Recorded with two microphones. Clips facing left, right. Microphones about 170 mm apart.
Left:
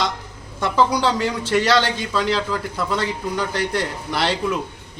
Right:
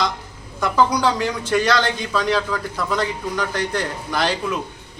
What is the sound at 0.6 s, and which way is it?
Speech, 30° left (ahead or behind).